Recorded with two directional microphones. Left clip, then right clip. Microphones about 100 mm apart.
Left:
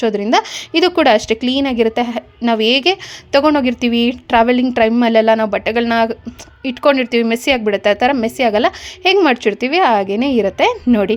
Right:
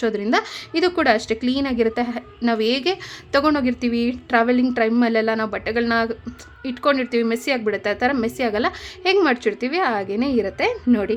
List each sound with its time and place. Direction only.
0.0 s a woman's voice: 50° left (ahead or behind)
3.5 s a woman's voice: 60° left (ahead or behind)